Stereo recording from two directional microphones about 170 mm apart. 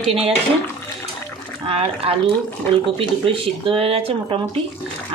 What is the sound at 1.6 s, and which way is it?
A woman's voice, 35° right (ahead or behind).